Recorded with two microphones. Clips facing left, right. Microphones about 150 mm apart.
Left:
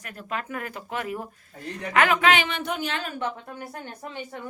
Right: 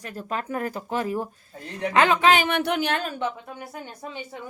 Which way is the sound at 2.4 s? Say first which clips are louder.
Right 6 dB; 65° right (ahead or behind).